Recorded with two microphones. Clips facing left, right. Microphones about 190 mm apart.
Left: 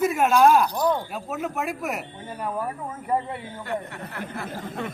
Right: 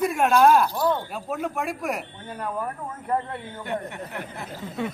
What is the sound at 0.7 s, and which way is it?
Speech, 15° left (ahead or behind).